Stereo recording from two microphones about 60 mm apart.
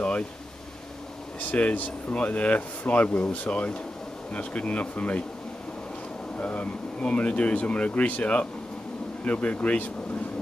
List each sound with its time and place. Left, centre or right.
1.5 s speech: left
6.3 s speech: left